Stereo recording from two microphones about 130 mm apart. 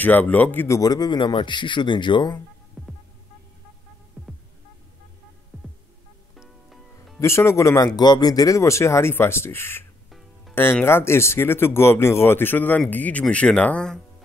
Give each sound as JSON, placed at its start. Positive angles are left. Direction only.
{"t": 0.0, "sound": "speech", "side_deg": 15}
{"t": 2.8, "sound": "hum", "side_deg": 5}
{"t": 5.5, "sound": "music", "side_deg": 10}
{"t": 7.2, "sound": "speech", "side_deg": 20}